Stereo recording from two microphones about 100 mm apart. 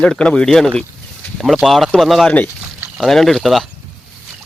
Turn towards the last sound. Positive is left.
turn(degrees=0)  # may be behind; listen again after turning